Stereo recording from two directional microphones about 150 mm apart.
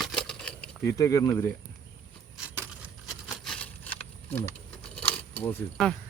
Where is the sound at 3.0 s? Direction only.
Centre (ahead or behind).